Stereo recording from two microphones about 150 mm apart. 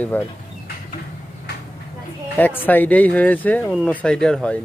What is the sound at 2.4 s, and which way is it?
Speech, 10° left (ahead or behind).